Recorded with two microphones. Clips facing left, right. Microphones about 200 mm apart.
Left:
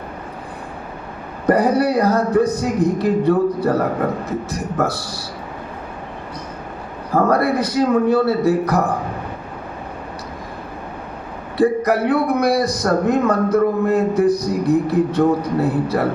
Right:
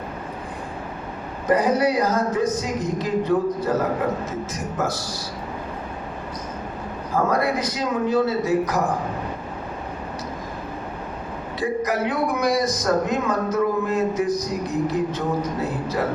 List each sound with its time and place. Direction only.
1.5 s a man's voice: 60° left (ahead or behind)
7.1 s a man's voice: 60° left (ahead or behind)
11.5 s a man's voice: 60° left (ahead or behind)